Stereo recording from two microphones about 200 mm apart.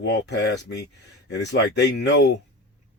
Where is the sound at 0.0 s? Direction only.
60° left (ahead or behind).